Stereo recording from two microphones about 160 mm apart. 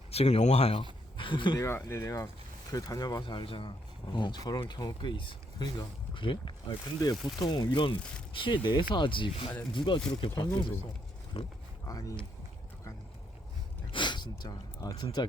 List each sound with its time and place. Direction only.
0.1 s speech: 40° left (ahead or behind)
1.1 s a sound: 30° left (ahead or behind)
1.5 s speech: 15° left (ahead or behind); by 11.5 s 35° left (ahead or behind)
11.9 s speech: 20° left (ahead or behind)
13.9 s speech: 30° left (ahead or behind)